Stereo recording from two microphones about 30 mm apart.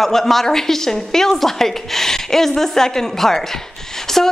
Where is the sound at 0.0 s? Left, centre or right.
Centre.